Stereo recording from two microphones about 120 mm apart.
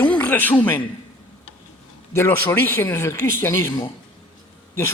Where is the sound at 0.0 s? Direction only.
10° left (ahead or behind).